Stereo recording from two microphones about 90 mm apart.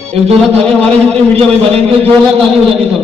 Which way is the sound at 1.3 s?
90° right.